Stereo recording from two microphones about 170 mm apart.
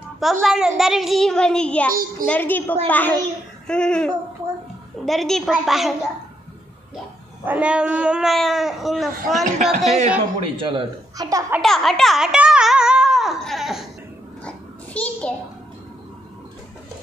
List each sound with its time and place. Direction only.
0.2 s a child's voice: centre (ahead or behind)
1.9 s a child's voice: 55° right (ahead or behind)
2.2 s a woman's voice: 10° left (ahead or behind)
7.4 s a child's voice: 10° right (ahead or behind)
9.1 s speech: 45° right (ahead or behind)
10.4 s speech: 30° right (ahead or behind)
11.6 s a sound: centre (ahead or behind)
15.0 s a sound: 10° left (ahead or behind)